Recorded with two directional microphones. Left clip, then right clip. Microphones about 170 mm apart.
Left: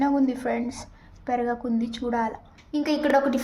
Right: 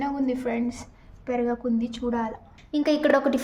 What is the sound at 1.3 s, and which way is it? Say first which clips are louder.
A woman's voice: even; 20° left (ahead or behind).